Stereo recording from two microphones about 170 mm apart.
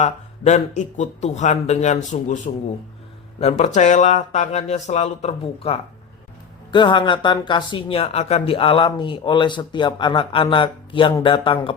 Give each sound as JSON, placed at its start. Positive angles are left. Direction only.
{"t": 0.0, "sound": "speech", "side_deg": 45}
{"t": 6.7, "sound": "speech", "side_deg": 25}